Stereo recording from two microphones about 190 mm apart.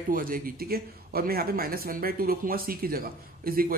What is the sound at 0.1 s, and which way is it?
A man's voice, 50° right (ahead or behind).